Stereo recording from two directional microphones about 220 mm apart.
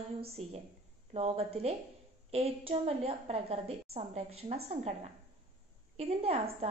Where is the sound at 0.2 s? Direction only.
25° right (ahead or behind).